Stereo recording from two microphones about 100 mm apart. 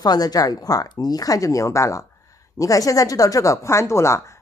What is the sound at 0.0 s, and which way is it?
Speech, 40° left (ahead or behind).